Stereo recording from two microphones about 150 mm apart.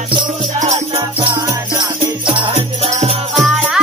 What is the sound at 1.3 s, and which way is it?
Music, 25° right (ahead or behind).